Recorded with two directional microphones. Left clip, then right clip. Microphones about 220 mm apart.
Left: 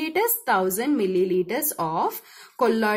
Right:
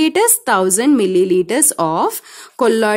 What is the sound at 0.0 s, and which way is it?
A woman's voice, 50° right (ahead or behind).